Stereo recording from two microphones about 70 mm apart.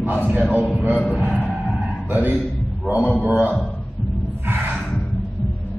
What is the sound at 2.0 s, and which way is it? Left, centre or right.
A man's voice, right.